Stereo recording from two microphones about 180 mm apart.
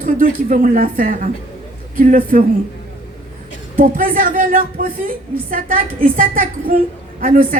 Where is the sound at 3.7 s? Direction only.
50° right (ahead or behind).